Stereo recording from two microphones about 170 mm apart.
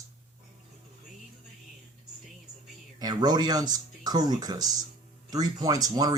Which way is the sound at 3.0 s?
25° right (ahead or behind).